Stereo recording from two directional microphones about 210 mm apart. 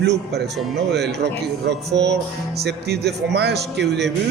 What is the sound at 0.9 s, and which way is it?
Speech, 55° right (ahead or behind).